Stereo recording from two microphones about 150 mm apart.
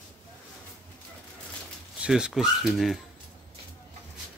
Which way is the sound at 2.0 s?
5° right (ahead or behind).